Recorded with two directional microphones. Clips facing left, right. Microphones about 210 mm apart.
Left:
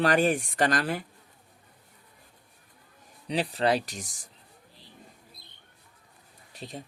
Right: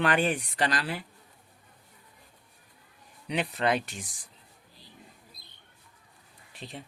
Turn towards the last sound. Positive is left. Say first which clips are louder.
# left 2 dB
turn(degrees=40)  # may be behind; listen again after turning